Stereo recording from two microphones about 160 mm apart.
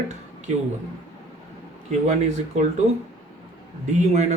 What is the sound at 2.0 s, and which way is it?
Speech, 45° right (ahead or behind).